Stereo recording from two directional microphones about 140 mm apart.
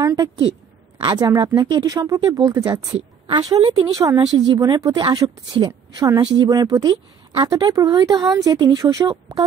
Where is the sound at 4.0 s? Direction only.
30° right (ahead or behind).